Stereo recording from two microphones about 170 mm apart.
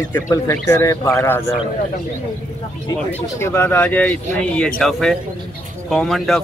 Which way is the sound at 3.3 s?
15° left (ahead or behind).